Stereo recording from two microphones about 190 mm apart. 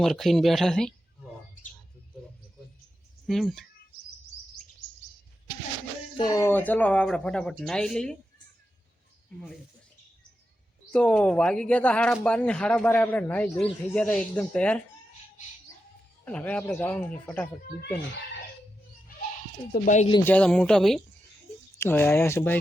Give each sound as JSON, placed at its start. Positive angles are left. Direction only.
{"t": 0.0, "sound": "speech", "side_deg": 0}
{"t": 3.2, "sound": "speech", "side_deg": 0}
{"t": 6.1, "sound": "speech", "side_deg": 20}
{"t": 10.9, "sound": "speech", "side_deg": 5}
{"t": 16.2, "sound": "speech", "side_deg": 5}
{"t": 19.7, "sound": "speech", "side_deg": 45}
{"t": 20.2, "sound": "speech", "side_deg": 5}